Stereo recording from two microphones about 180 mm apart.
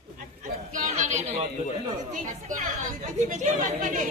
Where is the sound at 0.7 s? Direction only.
45° right (ahead or behind).